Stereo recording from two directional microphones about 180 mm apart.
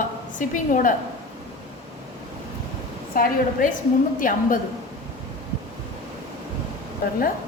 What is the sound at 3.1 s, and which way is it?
A woman's voice, 45° left (ahead or behind).